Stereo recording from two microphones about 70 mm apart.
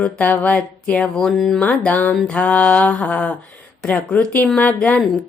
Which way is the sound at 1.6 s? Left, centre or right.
Centre.